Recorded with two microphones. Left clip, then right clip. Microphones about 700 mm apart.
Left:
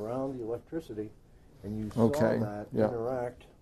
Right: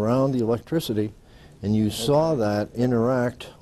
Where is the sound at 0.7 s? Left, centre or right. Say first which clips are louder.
Right 12 dB; right.